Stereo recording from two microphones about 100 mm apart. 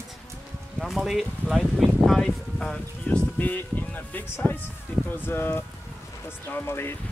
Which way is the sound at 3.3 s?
20° left (ahead or behind).